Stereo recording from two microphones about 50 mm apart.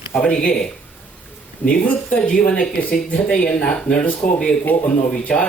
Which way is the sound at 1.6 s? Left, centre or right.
Left.